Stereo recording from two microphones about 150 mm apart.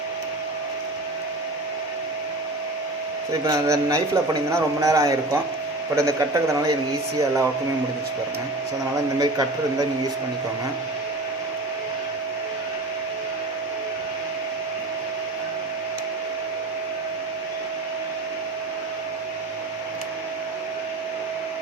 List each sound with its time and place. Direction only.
3.4 s a man's voice: 20° right (ahead or behind)
9.1 s a man's voice: 25° right (ahead or behind)